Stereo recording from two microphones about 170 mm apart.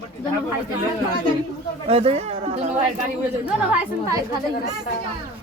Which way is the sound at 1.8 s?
35° right (ahead or behind).